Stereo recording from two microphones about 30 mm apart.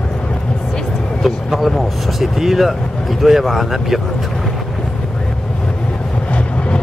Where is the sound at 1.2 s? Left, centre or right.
Centre.